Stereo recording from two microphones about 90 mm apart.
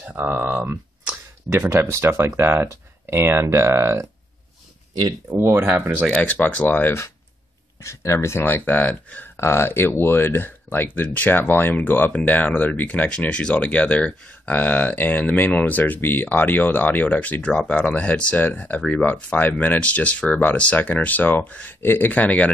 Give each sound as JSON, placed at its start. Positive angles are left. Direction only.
{"t": 0.0, "sound": "speech", "side_deg": -20}
{"t": 5.4, "sound": "speech", "side_deg": -25}
{"t": 6.0, "sound": "speech", "side_deg": 15}
{"t": 7.8, "sound": "speech", "side_deg": 35}